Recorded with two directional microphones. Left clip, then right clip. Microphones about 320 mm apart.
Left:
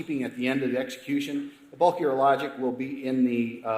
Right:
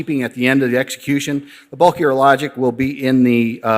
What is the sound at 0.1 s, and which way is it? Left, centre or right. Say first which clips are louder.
A man's voice: right 12 dB; right.